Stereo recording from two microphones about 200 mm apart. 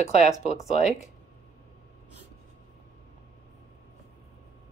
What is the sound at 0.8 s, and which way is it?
Speech, 35° left (ahead or behind).